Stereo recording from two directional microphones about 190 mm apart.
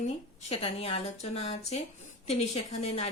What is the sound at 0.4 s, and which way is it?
A woman's voice, 30° left (ahead or behind).